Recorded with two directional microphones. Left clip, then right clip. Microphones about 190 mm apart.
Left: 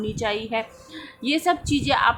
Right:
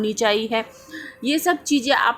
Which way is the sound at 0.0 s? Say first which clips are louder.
Right 6 dB; 25° right (ahead or behind).